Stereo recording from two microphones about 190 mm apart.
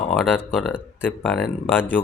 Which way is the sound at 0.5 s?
5° right (ahead or behind).